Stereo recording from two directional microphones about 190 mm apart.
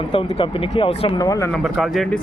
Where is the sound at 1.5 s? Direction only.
Centre (ahead or behind).